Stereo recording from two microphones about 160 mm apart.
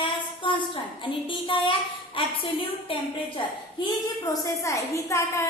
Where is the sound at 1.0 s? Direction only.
30° left (ahead or behind).